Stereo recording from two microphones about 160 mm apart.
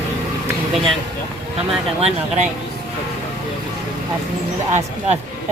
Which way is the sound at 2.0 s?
40° right (ahead or behind).